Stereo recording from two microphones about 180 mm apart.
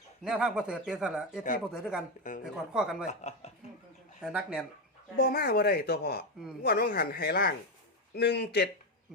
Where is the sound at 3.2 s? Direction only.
35° left (ahead or behind).